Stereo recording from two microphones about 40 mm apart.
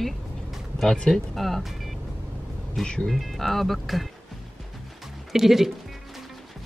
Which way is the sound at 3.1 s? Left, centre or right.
Centre.